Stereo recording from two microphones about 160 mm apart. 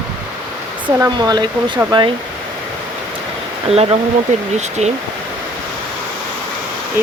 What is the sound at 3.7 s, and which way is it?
Speech, 40° right (ahead or behind).